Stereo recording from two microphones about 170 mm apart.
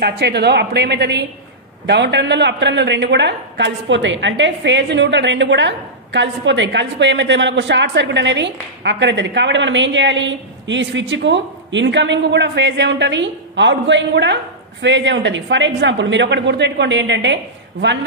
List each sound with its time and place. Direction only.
0.0 s a woman's voice: 75° right (ahead or behind)